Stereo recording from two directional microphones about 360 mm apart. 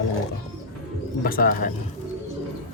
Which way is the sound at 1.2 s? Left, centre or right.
Left.